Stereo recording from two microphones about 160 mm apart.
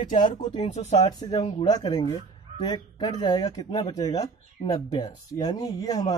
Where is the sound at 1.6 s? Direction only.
25° left (ahead or behind).